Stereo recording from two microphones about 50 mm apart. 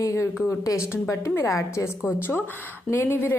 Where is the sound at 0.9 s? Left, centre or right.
Left.